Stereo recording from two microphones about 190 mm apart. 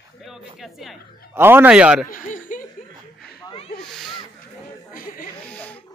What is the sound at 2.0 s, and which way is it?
Chuckle, 45° left (ahead or behind).